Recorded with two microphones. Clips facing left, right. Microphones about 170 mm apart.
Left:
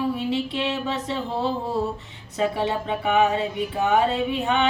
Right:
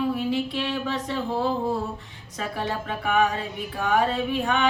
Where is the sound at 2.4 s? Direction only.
20° left (ahead or behind).